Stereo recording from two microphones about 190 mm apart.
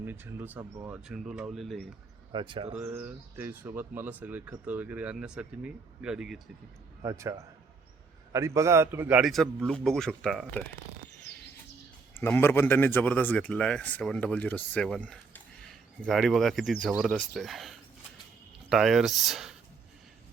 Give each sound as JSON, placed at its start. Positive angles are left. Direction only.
{"t": 0.0, "sound": "speech", "side_deg": -10}
{"t": 0.6, "sound": "speech", "side_deg": -20}
{"t": 0.9, "sound": "a man's voice", "side_deg": -5}
{"t": 2.3, "sound": "speech", "side_deg": -25}
{"t": 2.8, "sound": "a man's voice", "side_deg": -10}
{"t": 7.0, "sound": "a man's voice", "side_deg": -15}
{"t": 12.2, "sound": "a man's voice", "side_deg": 10}